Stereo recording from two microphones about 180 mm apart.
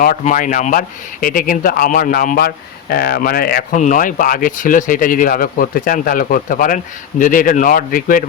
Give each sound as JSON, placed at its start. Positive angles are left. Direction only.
{"t": 0.0, "sound": "speech", "side_deg": 50}